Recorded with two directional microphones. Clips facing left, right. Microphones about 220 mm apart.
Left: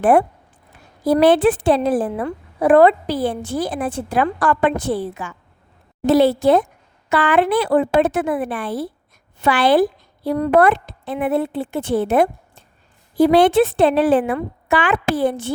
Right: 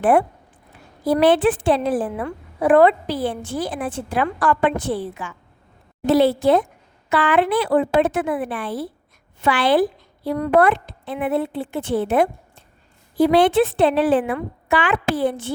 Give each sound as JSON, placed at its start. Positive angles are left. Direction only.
{"t": 0.0, "sound": "a woman's voice", "side_deg": 40}
{"t": 10.2, "sound": "a woman's voice", "side_deg": 30}
{"t": 10.5, "sound": "a woman's voice", "side_deg": 45}